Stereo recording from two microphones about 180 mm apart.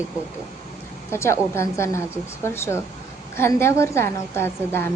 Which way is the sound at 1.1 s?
15° left (ahead or behind).